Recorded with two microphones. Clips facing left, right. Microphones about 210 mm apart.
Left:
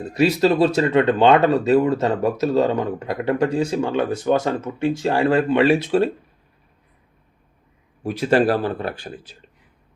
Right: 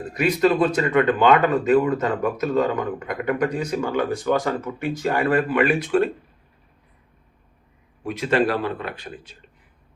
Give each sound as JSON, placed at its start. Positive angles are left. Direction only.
{"t": 0.1, "sound": "speech", "side_deg": 30}
{"t": 8.0, "sound": "speech", "side_deg": 35}